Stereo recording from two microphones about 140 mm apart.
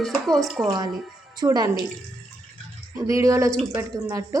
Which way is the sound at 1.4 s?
25° right (ahead or behind).